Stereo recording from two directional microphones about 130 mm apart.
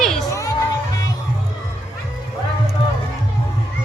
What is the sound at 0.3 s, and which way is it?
Music, 25° left (ahead or behind).